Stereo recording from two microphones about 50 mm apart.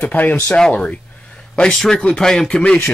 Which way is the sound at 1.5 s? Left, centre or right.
Centre.